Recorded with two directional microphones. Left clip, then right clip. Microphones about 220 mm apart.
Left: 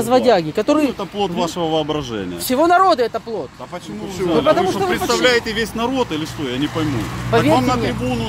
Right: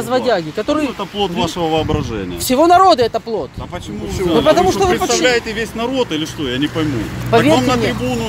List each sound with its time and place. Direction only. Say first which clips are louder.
0.1 s speech: left 2 dB; 20° left (ahead or behind)
1.3 s speech: right 2 dB; centre (ahead or behind)
2.4 s speech: right 4 dB; 10° right (ahead or behind)
4.5 s speech: right 5 dB; 20° right (ahead or behind)
5.2 s speech: right 1 dB; 35° left (ahead or behind)
5.8 s speech: right 3 dB; 15° left (ahead or behind)
6.1 s speech: right 3 dB; centre (ahead or behind)
7.2 s speech: right 4 dB; 20° right (ahead or behind)
7.5 s speech: right 2 dB; centre (ahead or behind)